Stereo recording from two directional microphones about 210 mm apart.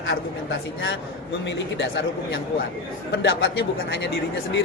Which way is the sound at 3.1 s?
60° left (ahead or behind).